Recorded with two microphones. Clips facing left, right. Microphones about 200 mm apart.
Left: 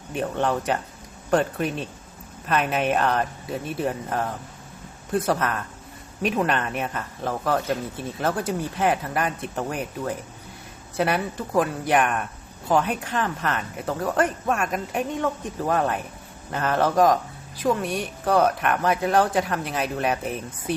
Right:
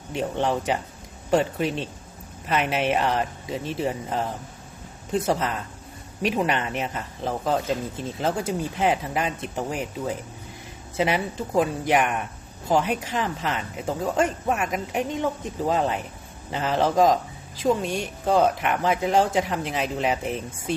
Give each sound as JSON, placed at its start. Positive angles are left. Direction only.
{"t": 0.1, "sound": "speech", "side_deg": -15}
{"t": 17.9, "sound": "speech", "side_deg": -20}